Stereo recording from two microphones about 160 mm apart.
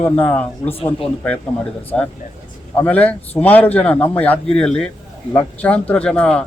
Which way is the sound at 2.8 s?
10° left (ahead or behind).